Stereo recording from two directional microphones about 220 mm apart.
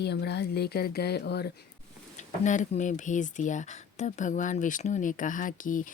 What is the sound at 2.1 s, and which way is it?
Speech, 35° left (ahead or behind).